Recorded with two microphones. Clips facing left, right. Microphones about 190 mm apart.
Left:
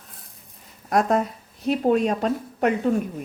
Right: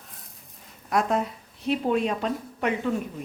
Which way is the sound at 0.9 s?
45° left (ahead or behind).